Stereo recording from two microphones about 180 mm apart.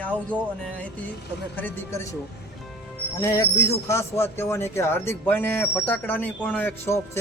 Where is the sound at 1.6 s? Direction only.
10° left (ahead or behind).